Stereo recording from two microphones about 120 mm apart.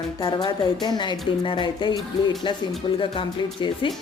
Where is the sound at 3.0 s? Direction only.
45° left (ahead or behind).